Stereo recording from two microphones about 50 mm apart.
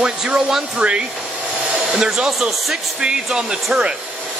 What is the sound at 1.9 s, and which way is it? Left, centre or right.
Speech, centre.